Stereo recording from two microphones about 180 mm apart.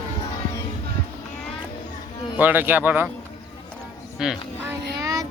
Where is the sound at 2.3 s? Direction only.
10° right (ahead or behind).